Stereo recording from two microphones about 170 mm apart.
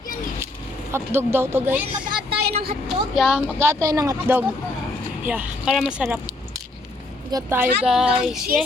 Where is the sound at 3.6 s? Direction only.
15° right (ahead or behind).